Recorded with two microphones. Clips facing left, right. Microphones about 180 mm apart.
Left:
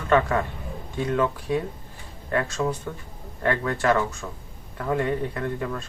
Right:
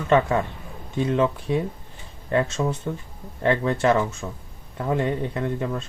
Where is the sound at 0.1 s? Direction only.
25° right (ahead or behind).